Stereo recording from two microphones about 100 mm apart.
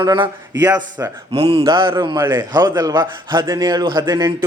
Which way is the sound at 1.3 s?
75° right (ahead or behind).